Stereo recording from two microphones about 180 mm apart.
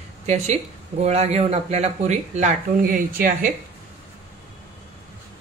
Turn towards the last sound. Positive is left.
turn(degrees=-50)  # may be behind; listen again after turning